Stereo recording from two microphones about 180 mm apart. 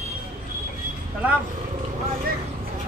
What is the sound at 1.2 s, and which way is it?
Speech, 10° right (ahead or behind).